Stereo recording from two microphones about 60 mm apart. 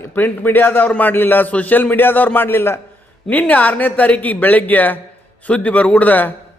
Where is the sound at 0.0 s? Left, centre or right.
Left.